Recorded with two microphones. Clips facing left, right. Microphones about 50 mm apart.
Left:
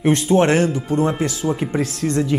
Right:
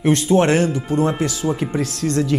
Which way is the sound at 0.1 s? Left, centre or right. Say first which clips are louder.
Even; left.